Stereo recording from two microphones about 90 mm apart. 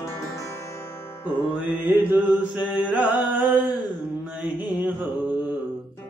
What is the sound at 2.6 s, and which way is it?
Music, 15° right (ahead or behind).